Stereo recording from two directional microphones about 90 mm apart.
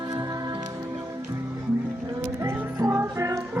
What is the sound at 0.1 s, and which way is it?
Music, 50° right (ahead or behind).